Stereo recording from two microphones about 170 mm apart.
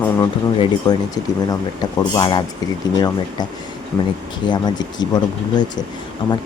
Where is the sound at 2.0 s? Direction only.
25° left (ahead or behind).